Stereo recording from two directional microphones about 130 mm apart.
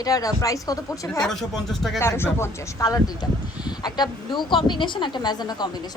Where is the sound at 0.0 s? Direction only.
25° left (ahead or behind).